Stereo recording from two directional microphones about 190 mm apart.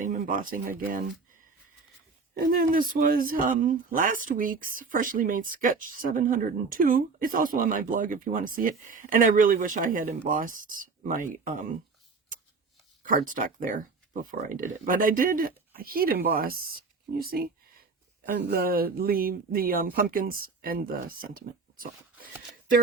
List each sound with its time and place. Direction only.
0.0 s speech: 45° right (ahead or behind)
2.5 s speech: 50° right (ahead or behind)
13.0 s speech: 45° right (ahead or behind)
17.2 s a sound: 50° right (ahead or behind)
18.3 s speech: 55° right (ahead or behind)